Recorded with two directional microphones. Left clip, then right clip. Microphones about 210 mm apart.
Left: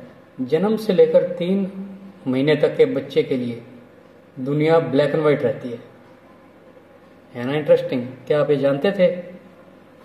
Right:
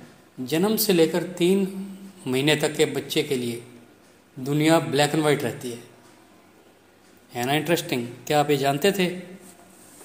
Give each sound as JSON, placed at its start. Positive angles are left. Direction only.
{"t": 0.5, "sound": "a man's voice", "side_deg": -35}
{"t": 7.3, "sound": "a man's voice", "side_deg": -40}